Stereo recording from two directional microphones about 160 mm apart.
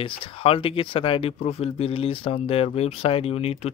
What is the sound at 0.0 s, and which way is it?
Speech, 35° left (ahead or behind).